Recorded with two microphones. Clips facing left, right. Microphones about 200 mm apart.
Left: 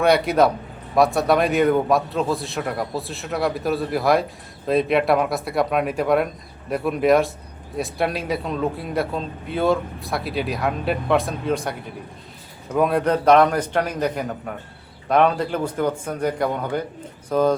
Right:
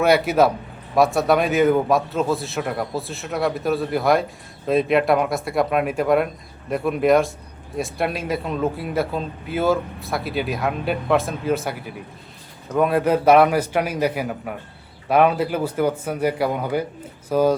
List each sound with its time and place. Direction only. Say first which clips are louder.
0.0 s a man's voice: even; 5° right (ahead or behind)